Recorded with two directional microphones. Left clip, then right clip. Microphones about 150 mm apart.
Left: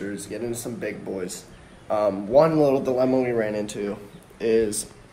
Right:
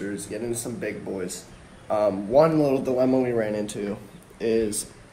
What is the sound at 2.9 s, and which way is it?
Speech, 5° left (ahead or behind).